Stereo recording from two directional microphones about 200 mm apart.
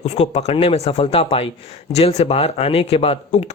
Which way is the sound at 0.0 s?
35° left (ahead or behind).